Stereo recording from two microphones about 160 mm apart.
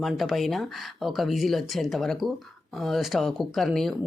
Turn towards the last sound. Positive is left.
turn(degrees=0)  # may be behind; listen again after turning